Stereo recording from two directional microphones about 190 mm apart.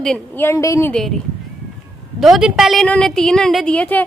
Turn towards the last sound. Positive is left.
turn(degrees=5)  # may be behind; listen again after turning